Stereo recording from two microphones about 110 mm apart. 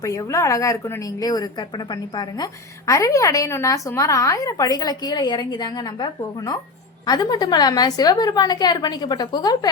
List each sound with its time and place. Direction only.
0.0 s a woman's voice: 30° left (ahead or behind)